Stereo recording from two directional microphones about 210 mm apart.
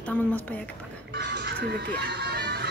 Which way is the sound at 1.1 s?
55° right (ahead or behind).